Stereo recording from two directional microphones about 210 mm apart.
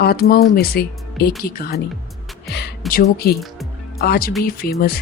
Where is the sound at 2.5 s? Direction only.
50° left (ahead or behind).